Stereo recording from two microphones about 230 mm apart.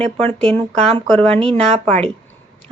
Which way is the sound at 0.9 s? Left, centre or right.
Right.